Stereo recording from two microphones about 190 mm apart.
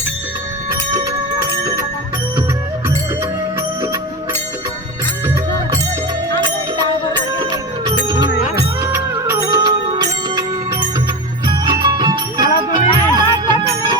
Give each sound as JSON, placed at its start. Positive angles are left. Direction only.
{"t": 7.3, "sound": "music", "side_deg": -20}